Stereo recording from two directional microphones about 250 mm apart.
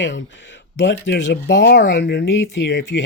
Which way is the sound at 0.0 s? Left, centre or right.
Left.